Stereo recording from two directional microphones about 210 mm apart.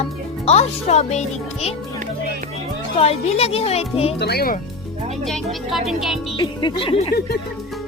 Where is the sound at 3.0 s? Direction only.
30° left (ahead or behind).